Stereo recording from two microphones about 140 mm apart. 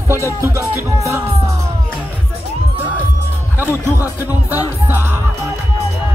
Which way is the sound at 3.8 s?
15° right (ahead or behind).